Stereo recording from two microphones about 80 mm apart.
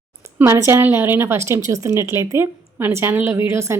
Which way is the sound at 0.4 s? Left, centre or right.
Right.